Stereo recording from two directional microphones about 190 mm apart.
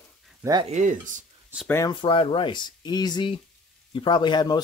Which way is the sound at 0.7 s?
40° right (ahead or behind).